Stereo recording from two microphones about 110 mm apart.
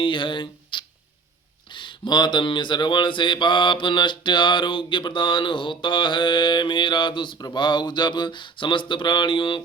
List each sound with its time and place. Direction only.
0.0 s speech: 45° left (ahead or behind)